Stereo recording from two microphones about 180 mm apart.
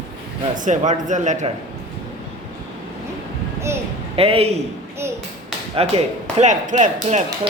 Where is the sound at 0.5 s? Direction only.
45° right (ahead or behind).